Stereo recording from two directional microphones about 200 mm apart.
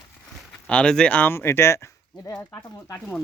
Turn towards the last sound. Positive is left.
turn(degrees=10)  # may be behind; listen again after turning